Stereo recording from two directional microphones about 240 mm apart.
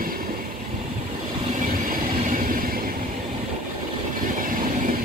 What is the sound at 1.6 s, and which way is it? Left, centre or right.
Train, right.